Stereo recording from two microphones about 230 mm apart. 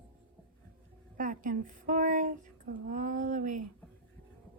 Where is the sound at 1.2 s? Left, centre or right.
Right.